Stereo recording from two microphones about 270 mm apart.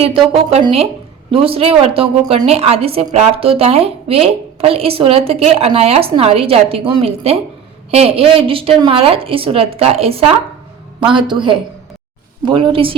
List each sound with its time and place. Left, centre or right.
0.3 s a woman's voice: right